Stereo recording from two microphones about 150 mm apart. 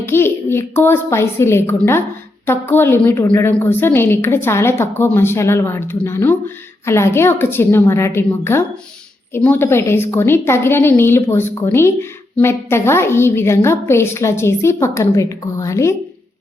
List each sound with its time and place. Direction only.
0.0 s a woman's voice: 15° left (ahead or behind)